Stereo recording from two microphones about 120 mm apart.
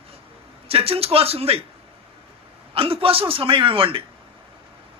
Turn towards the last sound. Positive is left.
turn(degrees=-50)  # may be behind; listen again after turning